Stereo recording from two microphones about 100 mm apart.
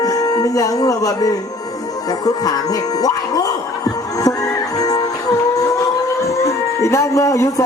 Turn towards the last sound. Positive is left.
turn(degrees=35)  # may be behind; listen again after turning